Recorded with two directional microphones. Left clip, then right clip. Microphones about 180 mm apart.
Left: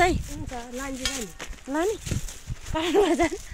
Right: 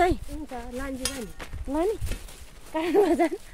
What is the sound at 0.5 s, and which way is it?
Speech, 20° left (ahead or behind).